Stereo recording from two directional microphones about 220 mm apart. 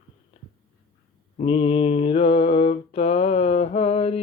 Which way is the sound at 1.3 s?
25° left (ahead or behind).